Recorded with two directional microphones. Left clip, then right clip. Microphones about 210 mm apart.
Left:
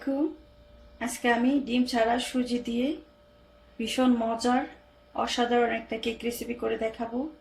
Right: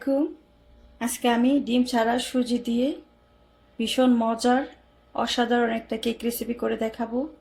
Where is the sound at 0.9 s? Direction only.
35° right (ahead or behind).